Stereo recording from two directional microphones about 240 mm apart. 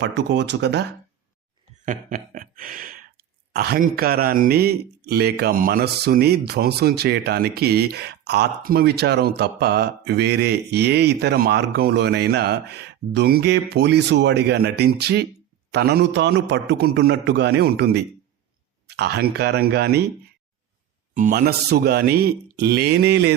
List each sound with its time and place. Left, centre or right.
0.0 s a man's voice: right
1.8 s a man's voice: right
21.1 s speech: right